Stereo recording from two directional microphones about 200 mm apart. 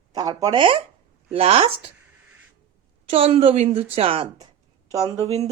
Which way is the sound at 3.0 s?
30° right (ahead or behind).